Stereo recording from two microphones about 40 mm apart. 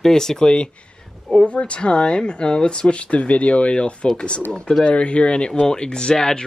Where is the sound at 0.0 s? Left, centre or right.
Centre.